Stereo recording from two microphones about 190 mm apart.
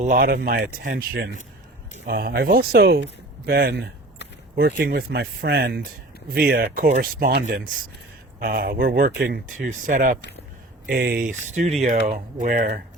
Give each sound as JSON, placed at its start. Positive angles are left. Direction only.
{"t": 0.0, "sound": "speech", "side_deg": -50}